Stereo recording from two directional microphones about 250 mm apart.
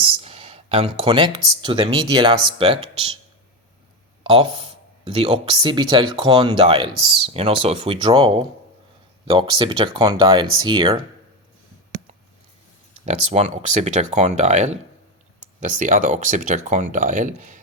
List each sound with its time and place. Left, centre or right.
0.2 s speech: right
4.2 s speech: right
13.1 s speech: right